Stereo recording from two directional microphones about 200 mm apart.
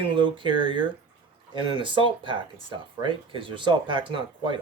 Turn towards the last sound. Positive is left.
turn(degrees=-25)  # may be behind; listen again after turning